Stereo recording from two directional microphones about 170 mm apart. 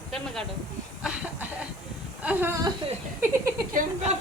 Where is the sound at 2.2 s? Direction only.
10° right (ahead or behind).